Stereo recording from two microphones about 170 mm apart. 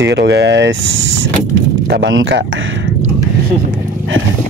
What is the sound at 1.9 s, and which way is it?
Speech, 90° right.